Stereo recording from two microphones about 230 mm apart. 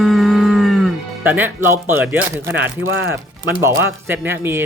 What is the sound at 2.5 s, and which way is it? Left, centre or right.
Speech, right.